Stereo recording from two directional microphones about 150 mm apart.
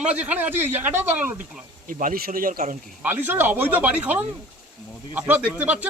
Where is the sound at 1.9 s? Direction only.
65° right (ahead or behind).